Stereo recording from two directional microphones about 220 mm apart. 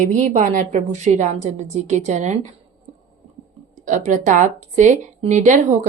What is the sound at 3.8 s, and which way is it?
Speech, 35° right (ahead or behind).